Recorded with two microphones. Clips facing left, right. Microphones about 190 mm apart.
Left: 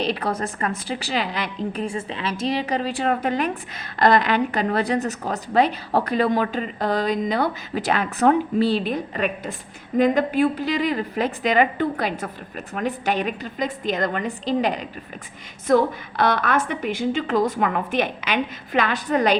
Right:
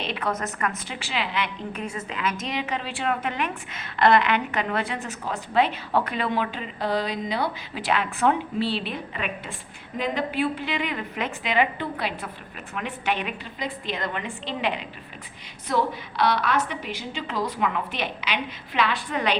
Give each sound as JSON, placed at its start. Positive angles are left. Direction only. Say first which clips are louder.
{"t": 0.0, "sound": "a woman's voice", "louder": "left 4 dB", "side_deg": 35}